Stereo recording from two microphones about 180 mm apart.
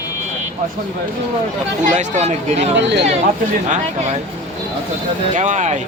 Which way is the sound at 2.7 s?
75° right (ahead or behind).